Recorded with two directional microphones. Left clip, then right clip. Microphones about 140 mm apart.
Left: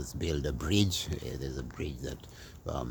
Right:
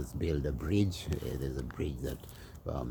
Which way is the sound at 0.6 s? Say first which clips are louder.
Left 4 dB; 45° left (ahead or behind).